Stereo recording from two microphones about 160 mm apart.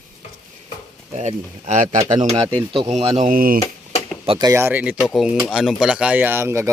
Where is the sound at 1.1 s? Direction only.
50° right (ahead or behind).